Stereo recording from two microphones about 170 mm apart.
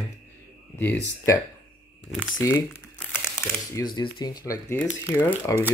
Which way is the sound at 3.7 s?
25° left (ahead or behind).